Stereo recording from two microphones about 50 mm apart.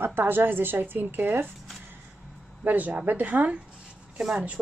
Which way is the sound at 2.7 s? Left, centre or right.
Right.